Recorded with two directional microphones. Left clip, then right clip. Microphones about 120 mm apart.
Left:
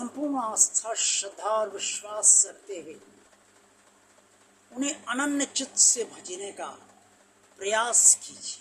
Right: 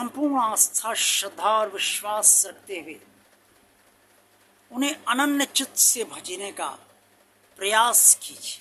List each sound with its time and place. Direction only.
0.0 s speech: 25° right (ahead or behind)
4.8 s speech: 25° right (ahead or behind)